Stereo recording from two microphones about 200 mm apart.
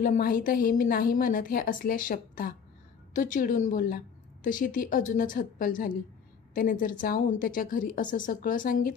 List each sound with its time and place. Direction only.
0.0 s a woman's voice: 45° left (ahead or behind)